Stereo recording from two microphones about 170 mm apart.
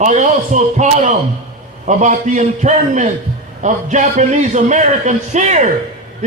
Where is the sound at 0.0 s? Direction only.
45° right (ahead or behind).